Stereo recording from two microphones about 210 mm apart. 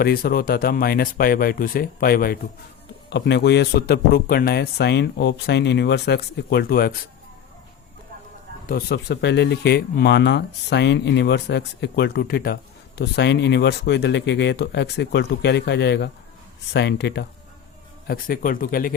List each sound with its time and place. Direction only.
0.0 s speech: 45° left (ahead or behind)
8.6 s speech: 50° left (ahead or behind)
18.1 s speech: 45° left (ahead or behind)